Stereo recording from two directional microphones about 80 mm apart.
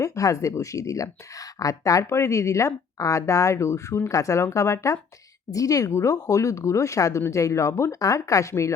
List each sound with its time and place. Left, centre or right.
0.0 s speech: left